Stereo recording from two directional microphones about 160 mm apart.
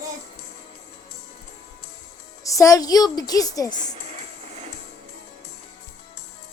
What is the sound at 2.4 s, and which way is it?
A woman's voice, 20° left (ahead or behind).